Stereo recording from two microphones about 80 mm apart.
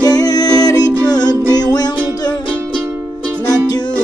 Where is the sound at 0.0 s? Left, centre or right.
Left.